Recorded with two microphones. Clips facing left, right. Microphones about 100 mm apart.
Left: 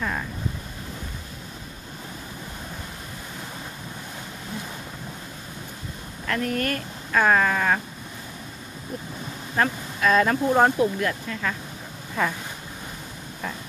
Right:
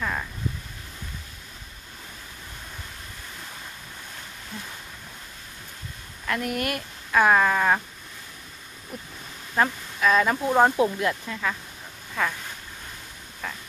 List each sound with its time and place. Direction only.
0.0 s vehicle: centre (ahead or behind)
6.2 s speech: 10° right (ahead or behind)
9.6 s speech: 5° right (ahead or behind)
10.8 s speech: 20° right (ahead or behind)